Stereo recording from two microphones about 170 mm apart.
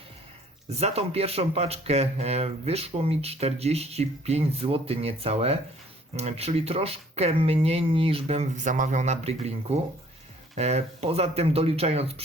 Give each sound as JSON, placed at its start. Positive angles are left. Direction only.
{"t": 0.7, "sound": "speech", "side_deg": -40}